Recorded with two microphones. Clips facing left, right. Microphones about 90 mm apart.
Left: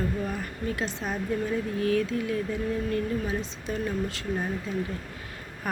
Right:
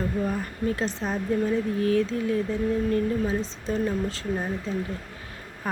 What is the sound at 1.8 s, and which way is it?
Speech, 30° right (ahead or behind).